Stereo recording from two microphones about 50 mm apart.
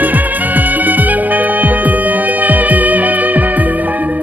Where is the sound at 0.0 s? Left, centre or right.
Right.